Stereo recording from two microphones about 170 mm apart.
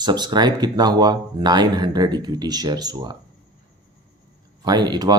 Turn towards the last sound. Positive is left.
turn(degrees=-25)  # may be behind; listen again after turning